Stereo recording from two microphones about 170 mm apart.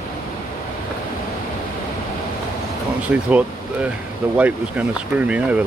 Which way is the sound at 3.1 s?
10° right (ahead or behind).